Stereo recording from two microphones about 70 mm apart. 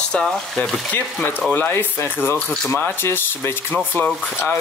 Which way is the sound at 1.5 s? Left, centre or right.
Left.